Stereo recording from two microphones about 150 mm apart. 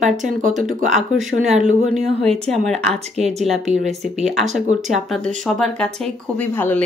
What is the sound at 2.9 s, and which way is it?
Speech, 45° right (ahead or behind).